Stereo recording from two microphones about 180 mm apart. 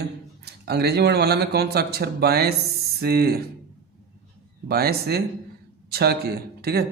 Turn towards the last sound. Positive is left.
turn(degrees=-60)  # may be behind; listen again after turning